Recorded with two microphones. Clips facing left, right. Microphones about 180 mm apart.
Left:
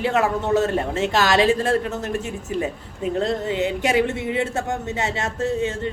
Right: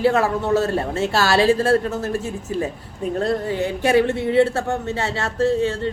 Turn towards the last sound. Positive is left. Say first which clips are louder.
# right 4 dB
turn(degrees=20)  # may be behind; listen again after turning